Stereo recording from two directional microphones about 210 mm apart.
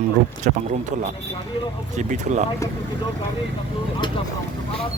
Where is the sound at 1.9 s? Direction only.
35° right (ahead or behind).